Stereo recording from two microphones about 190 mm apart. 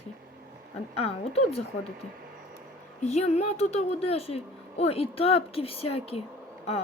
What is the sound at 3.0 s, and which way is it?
A woman's voice, 35° left (ahead or behind).